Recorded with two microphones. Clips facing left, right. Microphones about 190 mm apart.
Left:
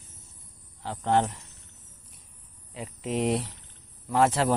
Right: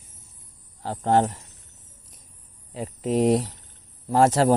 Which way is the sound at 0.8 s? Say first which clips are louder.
Right 4 dB; 40° right (ahead or behind).